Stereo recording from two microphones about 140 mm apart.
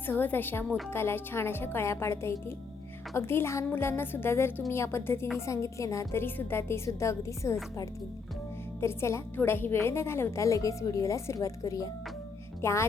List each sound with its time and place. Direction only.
0.0 s a woman's voice: 15° left (ahead or behind)
0.6 s a woman's voice: 5° left (ahead or behind)
0.9 s a woman's voice: 15° left (ahead or behind)